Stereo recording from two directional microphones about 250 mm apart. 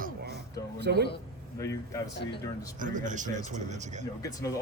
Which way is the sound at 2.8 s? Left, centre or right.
Right.